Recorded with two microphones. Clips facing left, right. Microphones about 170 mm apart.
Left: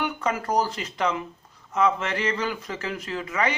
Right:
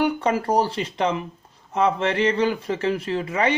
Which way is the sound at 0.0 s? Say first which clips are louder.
Right 6 dB; 30° right (ahead or behind).